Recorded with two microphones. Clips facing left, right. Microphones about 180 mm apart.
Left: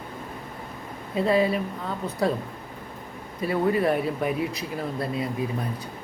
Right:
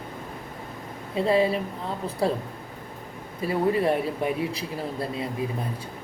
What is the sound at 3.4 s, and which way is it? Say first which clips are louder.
Speech: even; 25° right (ahead or behind).